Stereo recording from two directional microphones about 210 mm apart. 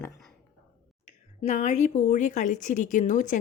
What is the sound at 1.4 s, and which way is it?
A woman's voice, 35° left (ahead or behind).